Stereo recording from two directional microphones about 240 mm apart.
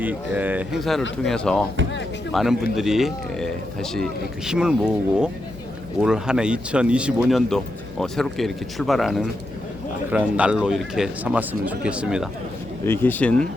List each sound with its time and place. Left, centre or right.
0.0 s speech: centre
12.8 s speech: centre